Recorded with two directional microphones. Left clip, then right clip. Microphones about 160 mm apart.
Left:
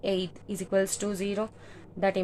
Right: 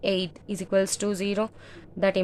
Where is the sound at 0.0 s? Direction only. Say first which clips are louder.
Right 3 dB; 20° right (ahead or behind).